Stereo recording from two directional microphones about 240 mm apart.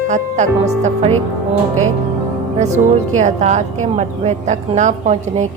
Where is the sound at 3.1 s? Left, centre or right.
Right.